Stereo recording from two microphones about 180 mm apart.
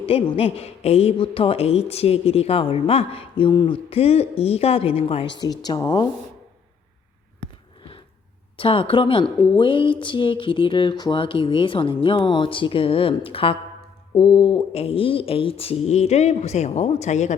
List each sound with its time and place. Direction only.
0.0 s a woman's voice: 30° left (ahead or behind)
8.5 s a woman's voice: 30° left (ahead or behind)